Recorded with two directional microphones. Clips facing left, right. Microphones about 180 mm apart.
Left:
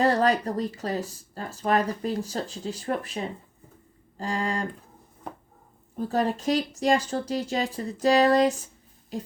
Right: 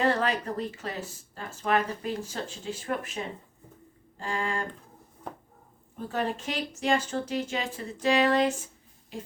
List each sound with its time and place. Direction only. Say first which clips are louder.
0.0 s speech: left 4 dB; 40° left (ahead or behind)
4.2 s speech: left 3 dB; 40° left (ahead or behind)
6.0 s speech: left 5 dB; 40° left (ahead or behind)